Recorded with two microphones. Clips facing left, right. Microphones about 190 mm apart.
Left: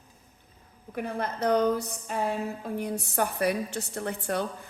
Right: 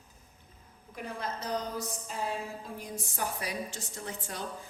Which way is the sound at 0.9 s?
60° left (ahead or behind).